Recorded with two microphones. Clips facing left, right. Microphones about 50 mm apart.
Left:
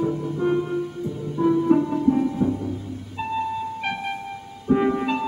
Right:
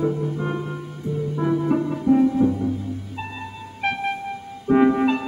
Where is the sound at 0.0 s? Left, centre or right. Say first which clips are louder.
Even; centre.